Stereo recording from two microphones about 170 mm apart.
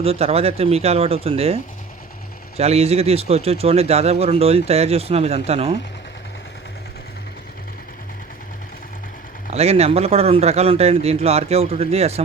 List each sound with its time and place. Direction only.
0.0 s a man's voice: 35° right (ahead or behind)
2.6 s a man's voice: 40° right (ahead or behind)
9.5 s a man's voice: 40° right (ahead or behind)